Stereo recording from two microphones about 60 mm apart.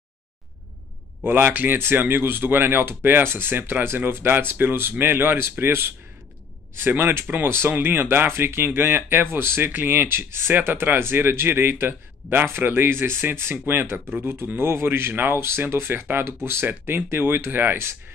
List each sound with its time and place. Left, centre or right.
1.2 s speech: right